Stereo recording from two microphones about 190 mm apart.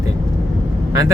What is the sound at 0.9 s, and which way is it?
Speech, 20° right (ahead or behind).